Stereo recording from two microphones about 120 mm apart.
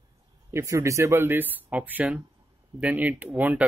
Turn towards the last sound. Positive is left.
turn(degrees=-15)  # may be behind; listen again after turning